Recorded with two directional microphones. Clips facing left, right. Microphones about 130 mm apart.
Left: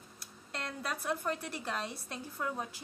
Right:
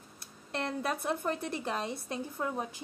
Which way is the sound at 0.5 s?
25° right (ahead or behind).